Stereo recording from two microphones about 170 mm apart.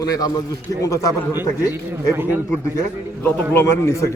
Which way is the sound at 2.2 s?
10° right (ahead or behind).